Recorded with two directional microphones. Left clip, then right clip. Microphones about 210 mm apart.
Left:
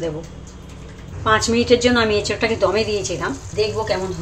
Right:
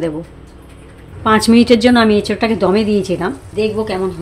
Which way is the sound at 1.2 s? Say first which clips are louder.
Right 5 dB; 50° right (ahead or behind).